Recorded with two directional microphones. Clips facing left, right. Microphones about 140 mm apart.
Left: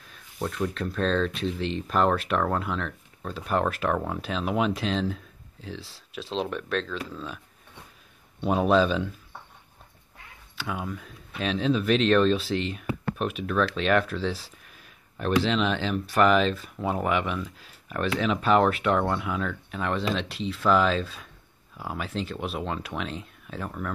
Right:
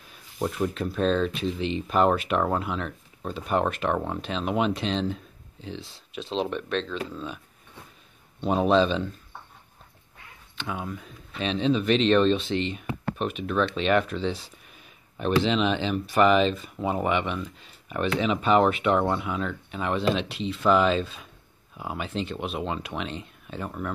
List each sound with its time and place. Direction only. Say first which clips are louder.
0.1 s speech: right 3 dB; 10° right (ahead or behind)
8.4 s speech: even; 5° left (ahead or behind)
10.6 s speech: even; 5° left (ahead or behind)